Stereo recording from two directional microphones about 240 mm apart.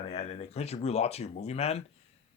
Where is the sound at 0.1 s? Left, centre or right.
Left.